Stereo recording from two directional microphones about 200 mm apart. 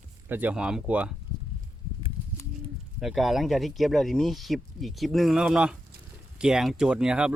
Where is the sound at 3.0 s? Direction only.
Centre (ahead or behind).